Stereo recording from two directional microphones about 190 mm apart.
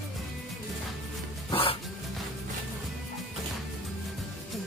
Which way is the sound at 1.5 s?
30° left (ahead or behind).